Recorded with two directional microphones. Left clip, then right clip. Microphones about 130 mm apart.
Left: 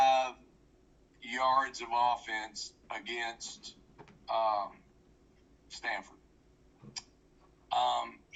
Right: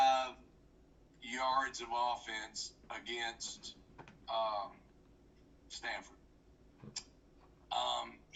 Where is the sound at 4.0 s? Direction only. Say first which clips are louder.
Left 5 dB; 10° left (ahead or behind).